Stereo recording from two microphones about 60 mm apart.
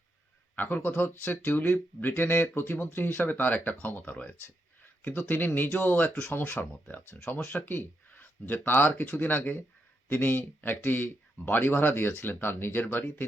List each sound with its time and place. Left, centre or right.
0.5 s speech: left
5.3 s speech: left